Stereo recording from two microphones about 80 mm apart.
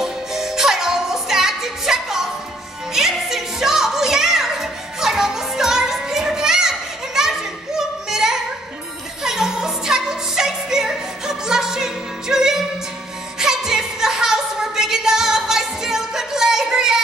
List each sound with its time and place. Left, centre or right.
0.0 s music: centre